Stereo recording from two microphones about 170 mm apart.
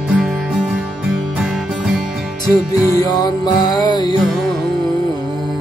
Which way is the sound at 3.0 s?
25° left (ahead or behind).